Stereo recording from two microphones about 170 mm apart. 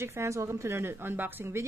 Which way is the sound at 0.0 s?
15° right (ahead or behind).